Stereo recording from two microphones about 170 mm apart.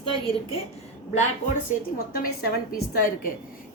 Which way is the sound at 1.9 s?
60° left (ahead or behind).